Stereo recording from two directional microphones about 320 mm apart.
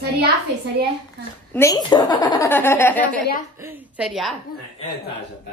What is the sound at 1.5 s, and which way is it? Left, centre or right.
A woman's voice, centre.